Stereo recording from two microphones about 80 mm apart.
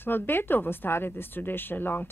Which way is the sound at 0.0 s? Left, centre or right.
Left.